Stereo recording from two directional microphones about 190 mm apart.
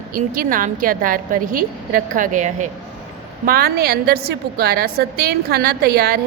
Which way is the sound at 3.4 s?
50° right (ahead or behind).